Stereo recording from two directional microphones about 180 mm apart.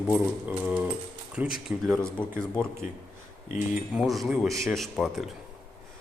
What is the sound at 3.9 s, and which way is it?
Speech, centre (ahead or behind).